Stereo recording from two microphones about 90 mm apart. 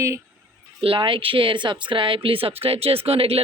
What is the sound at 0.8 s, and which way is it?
Speech, 80° right.